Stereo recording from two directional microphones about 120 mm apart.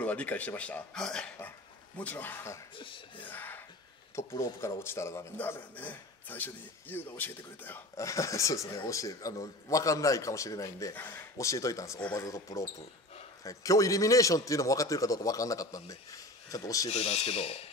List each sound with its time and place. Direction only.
0.0 s speech: 10° left (ahead or behind)
2.7 s speech: 45° left (ahead or behind)
3.3 s speech: 15° left (ahead or behind)
16.9 s speech: 60° left (ahead or behind)